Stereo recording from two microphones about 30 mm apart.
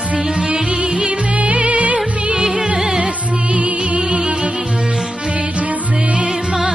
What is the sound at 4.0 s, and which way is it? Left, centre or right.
Music, right.